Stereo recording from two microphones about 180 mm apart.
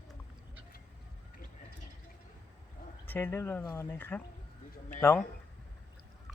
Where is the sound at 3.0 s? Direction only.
10° left (ahead or behind).